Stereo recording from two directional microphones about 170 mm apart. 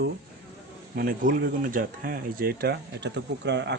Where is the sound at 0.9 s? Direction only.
55° right (ahead or behind); by 3.7 s 90° right.